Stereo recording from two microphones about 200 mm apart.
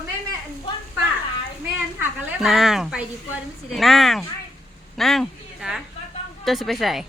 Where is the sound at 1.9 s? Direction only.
Centre (ahead or behind).